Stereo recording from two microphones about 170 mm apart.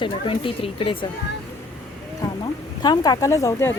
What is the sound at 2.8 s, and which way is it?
Speech, 25° left (ahead or behind).